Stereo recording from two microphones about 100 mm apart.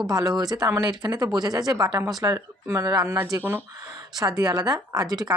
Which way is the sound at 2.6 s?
30° right (ahead or behind).